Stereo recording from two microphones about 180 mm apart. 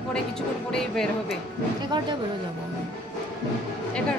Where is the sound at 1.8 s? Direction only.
25° right (ahead or behind).